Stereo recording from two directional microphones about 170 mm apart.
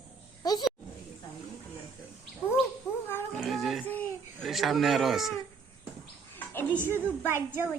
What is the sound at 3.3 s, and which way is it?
Music, centre (ahead or behind).